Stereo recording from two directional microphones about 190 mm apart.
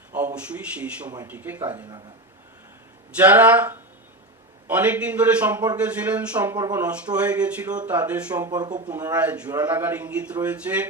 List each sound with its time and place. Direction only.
0.1 s a man's voice: 10° right (ahead or behind)
3.2 s speech: 10° right (ahead or behind)
6.6 s speech: 20° right (ahead or behind)
6.8 s speech: 5° right (ahead or behind)
8.4 s speech: 20° right (ahead or behind)
9.1 s speech: 5° right (ahead or behind)